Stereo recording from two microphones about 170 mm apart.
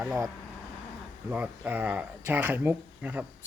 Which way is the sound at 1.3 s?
10° right (ahead or behind).